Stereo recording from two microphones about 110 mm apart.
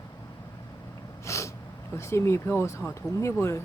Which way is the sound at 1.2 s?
25° left (ahead or behind).